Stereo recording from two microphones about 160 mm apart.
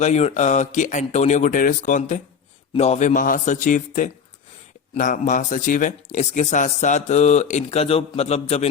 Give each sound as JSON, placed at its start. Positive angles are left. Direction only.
{"t": 0.0, "sound": "a man's voice", "side_deg": 45}